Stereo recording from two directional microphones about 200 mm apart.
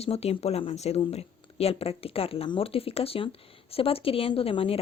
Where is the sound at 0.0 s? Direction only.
30° left (ahead or behind).